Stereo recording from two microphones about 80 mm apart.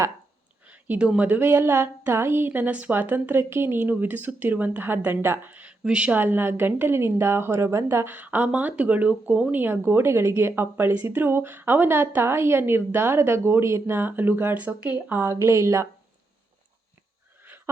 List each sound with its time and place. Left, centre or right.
0.6 s speech: centre; by 8.1 s right
8.1 s speech: centre
15.2 s speech: right